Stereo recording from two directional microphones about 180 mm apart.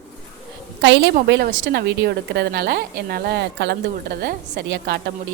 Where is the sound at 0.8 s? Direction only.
80° right.